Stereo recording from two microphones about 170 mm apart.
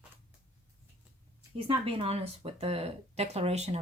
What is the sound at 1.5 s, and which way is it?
A woman's voice, 35° right (ahead or behind).